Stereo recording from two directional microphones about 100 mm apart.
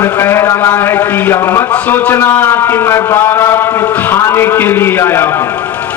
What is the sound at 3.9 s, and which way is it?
Speech, 15° left (ahead or behind).